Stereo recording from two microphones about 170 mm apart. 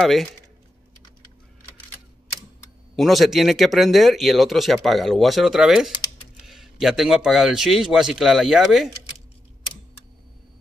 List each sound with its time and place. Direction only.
0.0 s speech: centre (ahead or behind)
3.0 s speech: centre (ahead or behind)